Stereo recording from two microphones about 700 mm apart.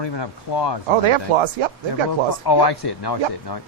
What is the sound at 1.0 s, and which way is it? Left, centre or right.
Speech, right.